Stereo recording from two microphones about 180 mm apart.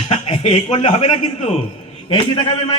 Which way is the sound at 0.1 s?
35° left (ahead or behind).